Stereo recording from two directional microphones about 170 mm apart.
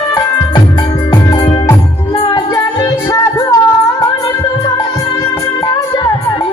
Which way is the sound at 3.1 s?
20° left (ahead or behind).